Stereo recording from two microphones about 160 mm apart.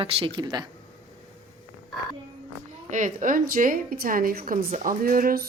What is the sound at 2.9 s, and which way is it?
A woman's voice, 50° right (ahead or behind).